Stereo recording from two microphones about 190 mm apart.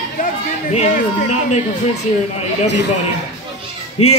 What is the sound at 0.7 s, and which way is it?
Speech, 35° left (ahead or behind).